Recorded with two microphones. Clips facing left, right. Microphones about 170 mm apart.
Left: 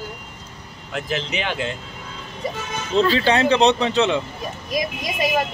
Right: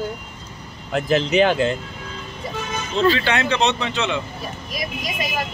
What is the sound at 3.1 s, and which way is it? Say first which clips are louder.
Speech: left 4 dB; 35° left (ahead or behind).